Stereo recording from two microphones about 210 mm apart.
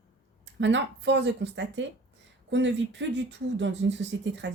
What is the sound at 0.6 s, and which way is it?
Speech, 60° right (ahead or behind).